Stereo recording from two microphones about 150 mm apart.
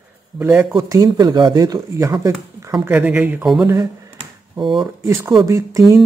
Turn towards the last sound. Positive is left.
turn(degrees=-20)  # may be behind; listen again after turning